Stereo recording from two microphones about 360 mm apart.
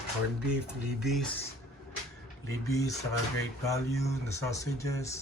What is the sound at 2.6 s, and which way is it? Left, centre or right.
Speech, centre.